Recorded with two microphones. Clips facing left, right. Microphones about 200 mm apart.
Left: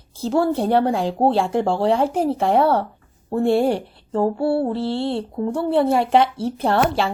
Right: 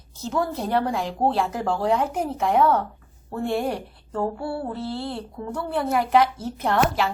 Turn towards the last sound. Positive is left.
turn(degrees=30)  # may be behind; listen again after turning